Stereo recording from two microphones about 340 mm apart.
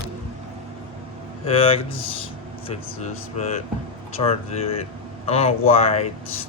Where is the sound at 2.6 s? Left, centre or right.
Centre.